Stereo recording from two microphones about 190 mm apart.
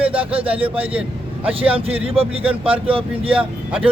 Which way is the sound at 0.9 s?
5° right (ahead or behind).